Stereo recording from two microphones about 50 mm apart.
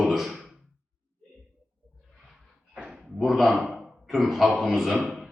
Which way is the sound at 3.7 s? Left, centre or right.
Centre.